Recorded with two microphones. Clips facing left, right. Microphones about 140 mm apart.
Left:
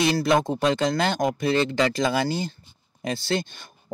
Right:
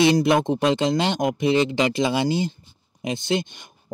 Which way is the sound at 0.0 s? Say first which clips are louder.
Right 3 dB; 20° right (ahead or behind).